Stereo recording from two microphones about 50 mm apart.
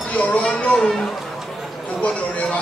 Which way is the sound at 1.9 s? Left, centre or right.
Left.